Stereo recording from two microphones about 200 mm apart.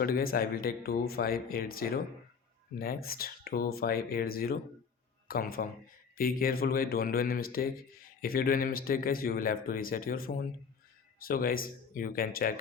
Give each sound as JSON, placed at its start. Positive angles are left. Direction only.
{"t": 0.0, "sound": "speech", "side_deg": 50}